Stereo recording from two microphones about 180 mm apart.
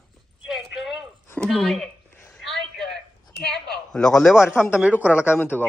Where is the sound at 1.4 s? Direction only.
Centre (ahead or behind).